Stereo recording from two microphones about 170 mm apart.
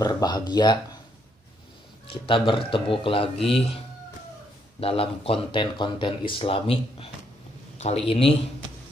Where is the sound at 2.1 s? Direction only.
30° left (ahead or behind).